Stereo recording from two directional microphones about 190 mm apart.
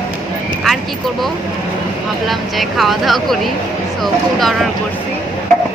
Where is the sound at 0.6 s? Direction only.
Centre (ahead or behind).